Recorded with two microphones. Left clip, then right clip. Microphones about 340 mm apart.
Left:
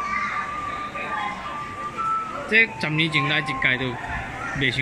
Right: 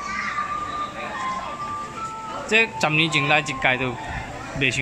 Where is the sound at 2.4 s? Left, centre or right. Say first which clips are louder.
Right 1 dB; centre.